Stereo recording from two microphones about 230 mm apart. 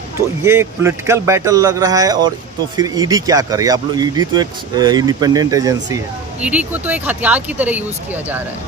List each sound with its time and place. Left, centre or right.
0.4 s speech: centre